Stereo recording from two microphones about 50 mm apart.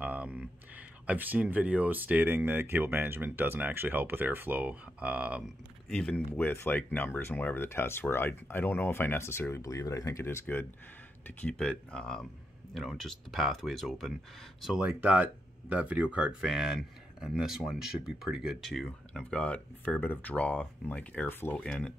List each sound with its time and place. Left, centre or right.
0.0 s speech: right
2.2 s speech: right
5.9 s speech: centre
6.3 s speech: left
9.5 s speech: left
10.4 s speech: left
11.5 s speech: centre
12.7 s speech: centre
15.0 s speech: right
16.3 s speech: centre
18.6 s speech: centre; by 19.9 s left
20.0 s speech: left
21.3 s speech: left
21.6 s speech: centre